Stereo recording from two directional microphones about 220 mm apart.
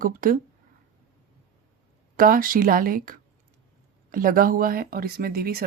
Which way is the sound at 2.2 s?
40° right (ahead or behind).